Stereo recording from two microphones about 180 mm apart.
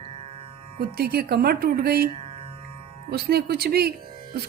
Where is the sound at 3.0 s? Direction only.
60° right (ahead or behind).